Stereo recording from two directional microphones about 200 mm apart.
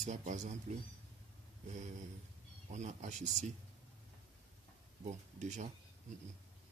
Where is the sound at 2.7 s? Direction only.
35° right (ahead or behind).